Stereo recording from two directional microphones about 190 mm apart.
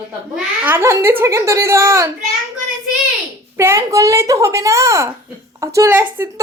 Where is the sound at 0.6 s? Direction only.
10° right (ahead or behind).